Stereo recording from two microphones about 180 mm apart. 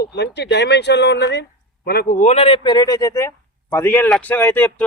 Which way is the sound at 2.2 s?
35° left (ahead or behind).